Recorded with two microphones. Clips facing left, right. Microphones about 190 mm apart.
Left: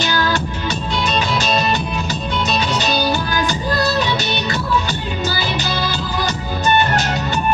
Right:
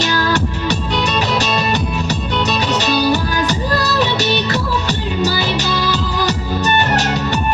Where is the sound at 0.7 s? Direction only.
65° right (ahead or behind).